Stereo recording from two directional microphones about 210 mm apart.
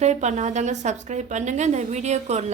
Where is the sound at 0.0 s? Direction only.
35° right (ahead or behind).